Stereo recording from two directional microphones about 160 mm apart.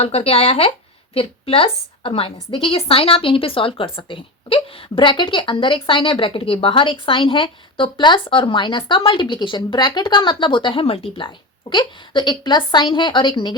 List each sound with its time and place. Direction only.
0.0 s a woman's voice: 40° left (ahead or behind)